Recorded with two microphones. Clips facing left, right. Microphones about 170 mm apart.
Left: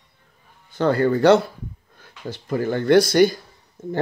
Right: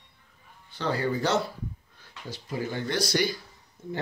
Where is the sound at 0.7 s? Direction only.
50° left (ahead or behind).